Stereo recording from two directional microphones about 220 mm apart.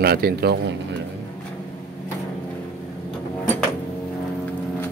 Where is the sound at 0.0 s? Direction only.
45° right (ahead or behind).